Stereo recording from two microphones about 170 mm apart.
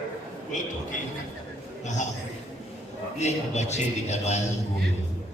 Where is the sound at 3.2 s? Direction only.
40° left (ahead or behind).